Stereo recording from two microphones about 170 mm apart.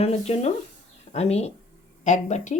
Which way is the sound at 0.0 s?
35° left (ahead or behind).